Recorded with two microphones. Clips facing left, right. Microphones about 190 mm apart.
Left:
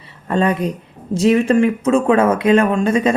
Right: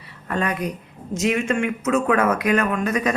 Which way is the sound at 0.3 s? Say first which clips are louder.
Left 7 dB; 30° left (ahead or behind).